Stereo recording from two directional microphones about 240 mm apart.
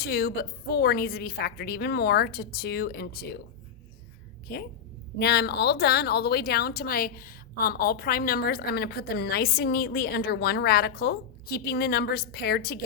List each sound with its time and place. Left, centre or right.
0.0 s a woman's voice: left
5.2 s a woman's voice: left